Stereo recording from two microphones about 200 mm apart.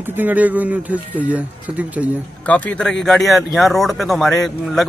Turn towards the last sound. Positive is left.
turn(degrees=0)  # may be behind; listen again after turning